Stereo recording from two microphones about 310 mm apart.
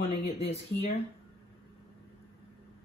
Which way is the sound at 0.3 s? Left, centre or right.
Left.